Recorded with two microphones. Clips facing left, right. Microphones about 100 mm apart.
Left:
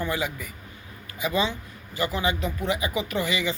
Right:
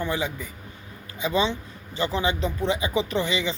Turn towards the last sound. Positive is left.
turn(degrees=-25)  # may be behind; listen again after turning